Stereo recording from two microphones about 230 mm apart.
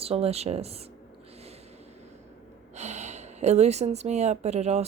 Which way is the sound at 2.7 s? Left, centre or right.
Right.